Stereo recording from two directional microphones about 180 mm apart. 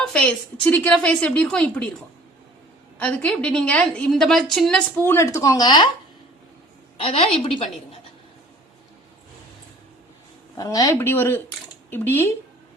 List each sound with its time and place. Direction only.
0.0 s a woman's voice: 5° left (ahead or behind)
5.0 s speech: 15° left (ahead or behind)
6.9 s a woman's voice: 35° left (ahead or behind)
10.6 s a woman's voice: 20° left (ahead or behind)